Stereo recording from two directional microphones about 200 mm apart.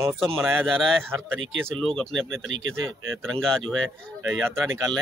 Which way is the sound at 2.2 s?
75° right (ahead or behind).